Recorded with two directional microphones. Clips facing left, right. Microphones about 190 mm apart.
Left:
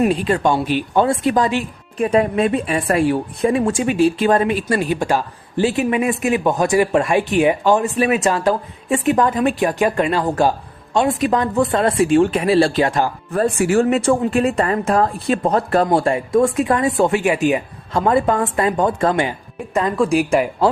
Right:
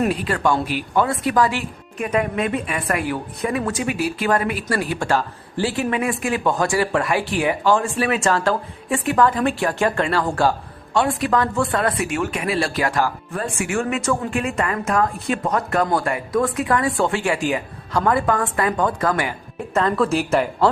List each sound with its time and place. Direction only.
0.0 s a woman's voice: 20° left (ahead or behind)
13.3 s a woman's voice: 35° left (ahead or behind); by 20.7 s 15° left (ahead or behind)